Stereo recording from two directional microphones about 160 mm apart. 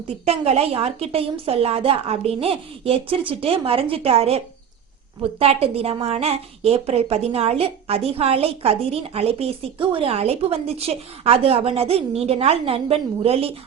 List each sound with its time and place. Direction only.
0.3 s a woman's voice: 40° right (ahead or behind)